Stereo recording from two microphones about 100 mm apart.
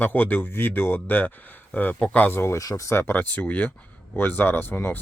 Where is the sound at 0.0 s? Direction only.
20° left (ahead or behind).